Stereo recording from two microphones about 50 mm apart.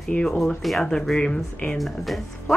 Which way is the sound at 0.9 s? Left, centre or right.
Centre.